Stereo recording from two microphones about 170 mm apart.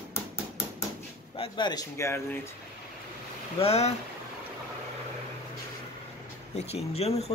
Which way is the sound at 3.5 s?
35° left (ahead or behind).